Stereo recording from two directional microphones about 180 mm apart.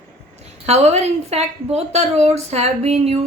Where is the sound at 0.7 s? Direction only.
35° right (ahead or behind).